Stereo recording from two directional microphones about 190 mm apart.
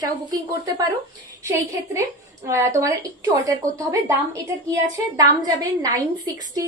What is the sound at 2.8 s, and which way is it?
A woman's voice, 15° right (ahead or behind).